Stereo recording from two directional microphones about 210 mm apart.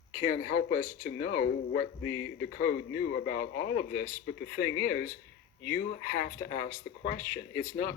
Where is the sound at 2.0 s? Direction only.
65° left (ahead or behind).